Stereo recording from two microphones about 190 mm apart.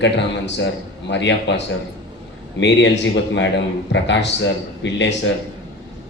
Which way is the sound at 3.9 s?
70° left (ahead or behind).